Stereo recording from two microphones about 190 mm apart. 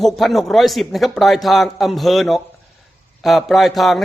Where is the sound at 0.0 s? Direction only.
Centre (ahead or behind).